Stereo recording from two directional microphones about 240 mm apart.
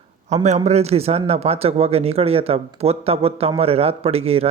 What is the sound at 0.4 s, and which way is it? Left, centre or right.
Speech, right.